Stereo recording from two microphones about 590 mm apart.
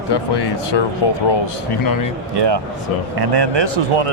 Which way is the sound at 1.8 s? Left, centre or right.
Left.